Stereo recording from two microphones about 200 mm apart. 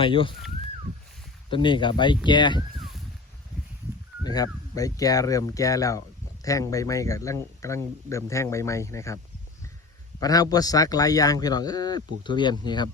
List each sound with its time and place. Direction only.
0.0 s a man's voice: 25° left (ahead or behind)
1.5 s a man's voice: 25° left (ahead or behind)
4.2 s speech: 20° left (ahead or behind)
10.2 s a man's voice: 20° left (ahead or behind)